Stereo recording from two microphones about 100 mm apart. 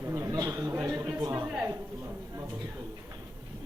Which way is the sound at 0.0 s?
30° right (ahead or behind).